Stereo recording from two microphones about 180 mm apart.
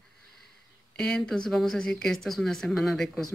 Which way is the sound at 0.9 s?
5° left (ahead or behind).